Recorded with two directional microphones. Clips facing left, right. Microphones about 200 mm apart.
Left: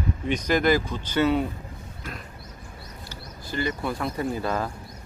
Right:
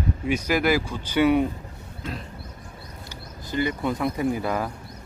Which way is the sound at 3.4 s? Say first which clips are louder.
Right 3 dB; 20° right (ahead or behind).